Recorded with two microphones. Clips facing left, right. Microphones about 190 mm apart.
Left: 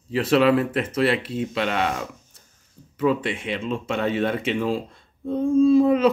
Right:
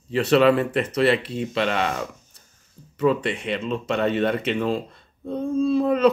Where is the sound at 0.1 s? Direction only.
5° left (ahead or behind).